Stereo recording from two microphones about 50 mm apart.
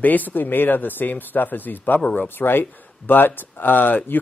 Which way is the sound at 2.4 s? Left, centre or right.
Left.